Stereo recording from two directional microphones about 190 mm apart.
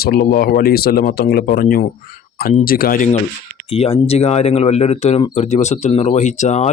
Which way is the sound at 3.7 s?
30° left (ahead or behind).